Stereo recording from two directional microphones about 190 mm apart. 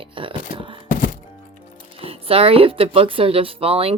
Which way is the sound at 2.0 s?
30° right (ahead or behind).